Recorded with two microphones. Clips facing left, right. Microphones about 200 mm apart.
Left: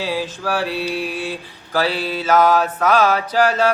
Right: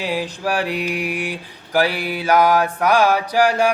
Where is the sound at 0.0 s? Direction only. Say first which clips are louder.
Even; 15° right (ahead or behind).